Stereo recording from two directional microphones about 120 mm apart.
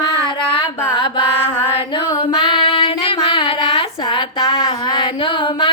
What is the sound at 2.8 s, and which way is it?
Female singing, 45° left (ahead or behind).